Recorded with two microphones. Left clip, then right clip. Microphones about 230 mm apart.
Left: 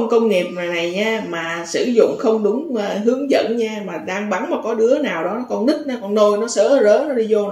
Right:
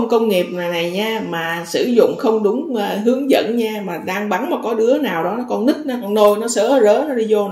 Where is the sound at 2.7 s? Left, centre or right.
Right.